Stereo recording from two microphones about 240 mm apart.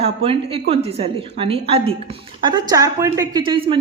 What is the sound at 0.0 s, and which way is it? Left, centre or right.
A woman's voice, right.